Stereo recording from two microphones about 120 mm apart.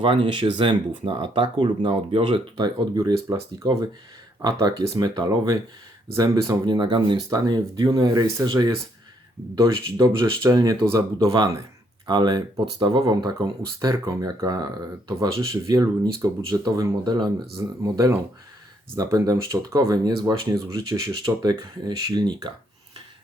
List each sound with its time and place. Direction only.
0.0 s speech: 45° right (ahead or behind); by 11.3 s 25° right (ahead or behind)
12.0 s speech: 40° right (ahead or behind)